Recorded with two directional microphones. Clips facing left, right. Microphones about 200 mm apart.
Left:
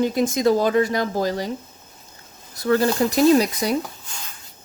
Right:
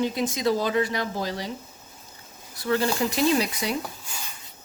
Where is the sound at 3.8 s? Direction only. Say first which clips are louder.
Even; 5° right (ahead or behind).